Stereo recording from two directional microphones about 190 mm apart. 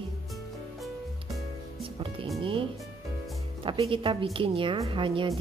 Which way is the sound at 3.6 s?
25° right (ahead or behind).